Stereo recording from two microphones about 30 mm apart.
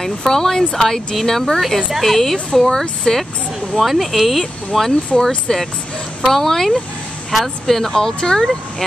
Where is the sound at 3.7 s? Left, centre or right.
Centre.